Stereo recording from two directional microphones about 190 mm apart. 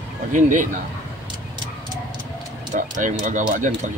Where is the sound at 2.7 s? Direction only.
40° right (ahead or behind).